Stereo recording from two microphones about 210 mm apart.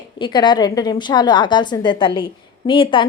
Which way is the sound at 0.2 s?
20° left (ahead or behind).